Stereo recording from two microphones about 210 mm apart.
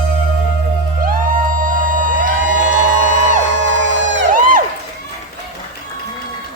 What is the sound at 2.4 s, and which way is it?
Music, 90° left.